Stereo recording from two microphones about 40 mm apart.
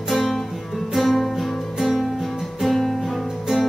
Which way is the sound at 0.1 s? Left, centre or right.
Centre.